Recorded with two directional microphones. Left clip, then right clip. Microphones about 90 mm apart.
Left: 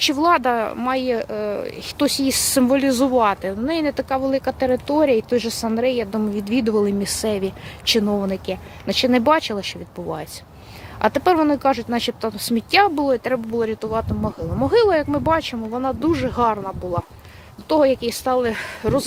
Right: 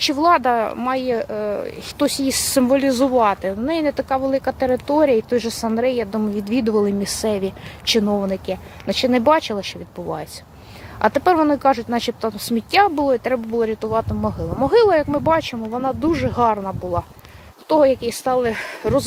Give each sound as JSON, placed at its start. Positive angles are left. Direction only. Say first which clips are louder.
{"t": 0.0, "sound": "speech", "louder": "right 1 dB", "side_deg": 40}
{"t": 0.8, "sound": "speech", "louder": "even", "side_deg": 40}
{"t": 3.4, "sound": "speech", "louder": "right 2 dB", "side_deg": 20}
{"t": 4.1, "sound": "speech", "louder": "right 1 dB", "side_deg": 40}
{"t": 8.1, "sound": "speech", "louder": "right 2 dB", "side_deg": 35}
{"t": 13.9, "sound": "speech", "louder": "right 3 dB", "side_deg": 0}
{"t": 14.9, "sound": "speech", "louder": "right 2 dB", "side_deg": 25}
{"t": 17.7, "sound": "speech", "louder": "right 2 dB", "side_deg": 40}
{"t": 18.4, "sound": "speech", "louder": "right 1 dB", "side_deg": 15}